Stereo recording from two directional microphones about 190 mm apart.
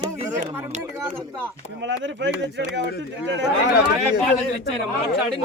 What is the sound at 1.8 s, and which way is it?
Speech, 75° right (ahead or behind).